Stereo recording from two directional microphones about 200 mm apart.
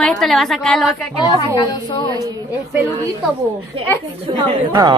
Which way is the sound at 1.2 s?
20° left (ahead or behind).